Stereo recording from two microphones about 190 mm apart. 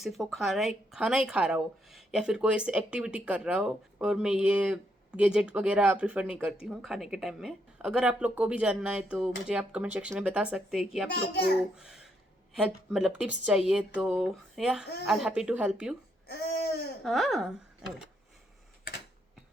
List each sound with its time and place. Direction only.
0.0 s speech: centre (ahead or behind)
11.1 s a child's voice: 60° left (ahead or behind)
12.6 s speech: centre (ahead or behind)
16.2 s babbling: 60° left (ahead or behind)
17.0 s speech: centre (ahead or behind)